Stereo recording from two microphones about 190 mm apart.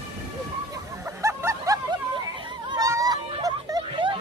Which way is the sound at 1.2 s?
15° right (ahead or behind).